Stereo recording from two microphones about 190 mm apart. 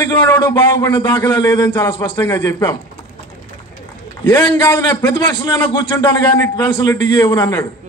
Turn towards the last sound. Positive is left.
turn(degrees=15)  # may be behind; listen again after turning